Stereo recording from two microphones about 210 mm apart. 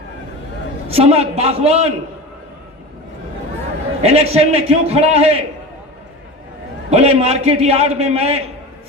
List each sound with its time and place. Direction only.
0.9 s a man's voice: 30° right (ahead or behind)
4.0 s a man's voice: 30° right (ahead or behind)
6.9 s a man's voice: 30° right (ahead or behind)